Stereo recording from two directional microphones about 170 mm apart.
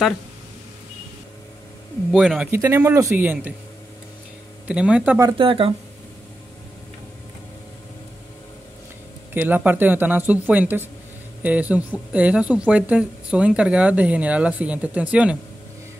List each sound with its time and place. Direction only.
2.1 s speech: centre (ahead or behind)
2.5 s speech: 15° right (ahead or behind)
4.6 s speech: 5° right (ahead or behind)
5.2 s speech: 30° right (ahead or behind)
9.3 s speech: 10° right (ahead or behind)